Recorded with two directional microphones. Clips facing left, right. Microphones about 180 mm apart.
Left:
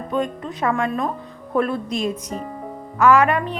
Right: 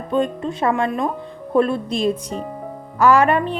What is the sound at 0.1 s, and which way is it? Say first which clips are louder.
A woman's voice: right 4 dB; 30° right (ahead or behind).